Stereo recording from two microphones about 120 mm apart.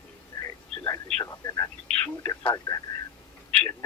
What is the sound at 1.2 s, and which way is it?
Speech, 30° left (ahead or behind).